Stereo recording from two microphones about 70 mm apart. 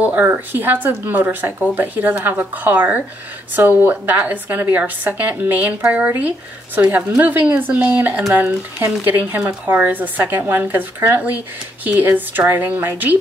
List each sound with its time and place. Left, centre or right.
0.0 s speech: right